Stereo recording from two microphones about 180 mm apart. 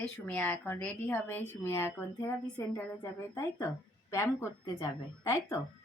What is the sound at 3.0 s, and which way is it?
Speech, 20° left (ahead or behind).